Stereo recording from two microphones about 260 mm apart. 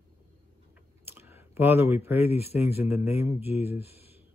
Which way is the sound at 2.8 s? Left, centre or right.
Centre.